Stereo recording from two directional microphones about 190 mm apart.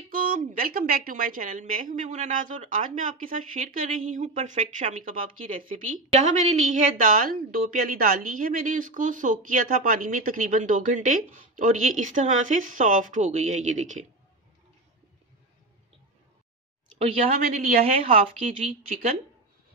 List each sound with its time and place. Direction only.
0.1 s a woman's voice: 45° right (ahead or behind)
17.0 s speech: 35° right (ahead or behind)
17.4 s a woman's voice: 50° right (ahead or behind)
18.0 s speech: 30° right (ahead or behind)